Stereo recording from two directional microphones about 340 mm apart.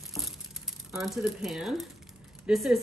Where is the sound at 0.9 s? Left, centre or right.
Centre.